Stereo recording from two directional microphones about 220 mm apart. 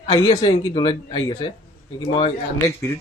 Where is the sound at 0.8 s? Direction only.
20° left (ahead or behind).